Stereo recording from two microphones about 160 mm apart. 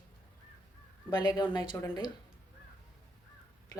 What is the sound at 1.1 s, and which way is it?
Speech, 25° left (ahead or behind).